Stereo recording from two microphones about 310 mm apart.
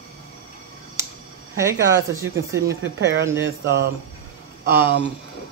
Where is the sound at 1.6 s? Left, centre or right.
Centre.